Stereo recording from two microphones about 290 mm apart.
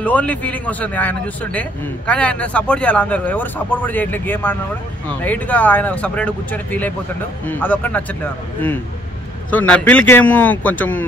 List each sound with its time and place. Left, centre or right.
0.0 s a man's voice: centre
9.5 s a man's voice: centre